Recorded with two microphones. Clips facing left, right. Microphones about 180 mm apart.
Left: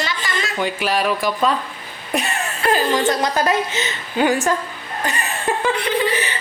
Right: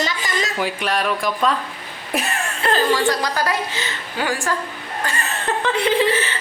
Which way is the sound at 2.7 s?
20° left (ahead or behind).